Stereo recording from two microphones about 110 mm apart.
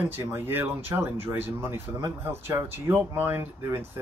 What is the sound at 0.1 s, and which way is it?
Speech, 20° right (ahead or behind).